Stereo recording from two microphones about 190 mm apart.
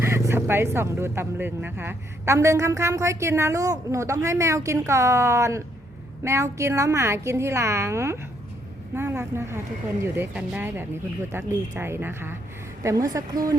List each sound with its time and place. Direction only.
0.0 s speech: 15° right (ahead or behind)